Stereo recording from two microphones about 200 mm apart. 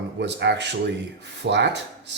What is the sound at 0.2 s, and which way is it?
Speech, 60° right (ahead or behind).